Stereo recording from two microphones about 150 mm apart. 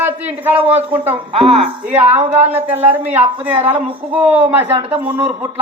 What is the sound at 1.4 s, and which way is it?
Speech, centre (ahead or behind).